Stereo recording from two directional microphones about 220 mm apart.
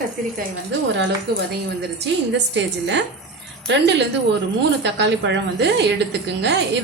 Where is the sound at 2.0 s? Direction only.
55° right (ahead or behind).